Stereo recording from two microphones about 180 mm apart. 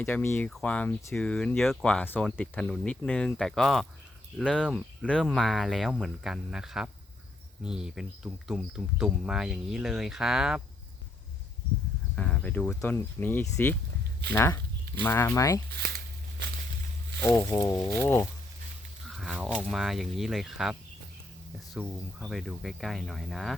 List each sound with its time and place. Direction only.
0.0 s speech: 10° left (ahead or behind)
12.1 s speech: 5° left (ahead or behind)
15.7 s speech: 70° right (ahead or behind)
17.2 s speech: 10° left (ahead or behind)
19.0 s speech: centre (ahead or behind)